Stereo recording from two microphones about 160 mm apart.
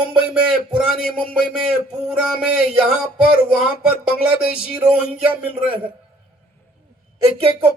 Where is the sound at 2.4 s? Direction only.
5° right (ahead or behind).